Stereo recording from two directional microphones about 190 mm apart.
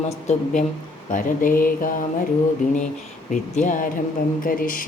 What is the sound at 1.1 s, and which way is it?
Speech, 45° left (ahead or behind).